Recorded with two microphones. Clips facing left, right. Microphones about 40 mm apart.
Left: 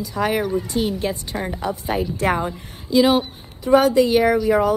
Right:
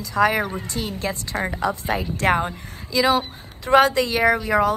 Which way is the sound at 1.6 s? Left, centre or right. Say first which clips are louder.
Left 2 dB; right.